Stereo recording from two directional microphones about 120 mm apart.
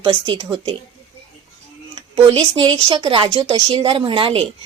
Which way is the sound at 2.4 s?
25° right (ahead or behind).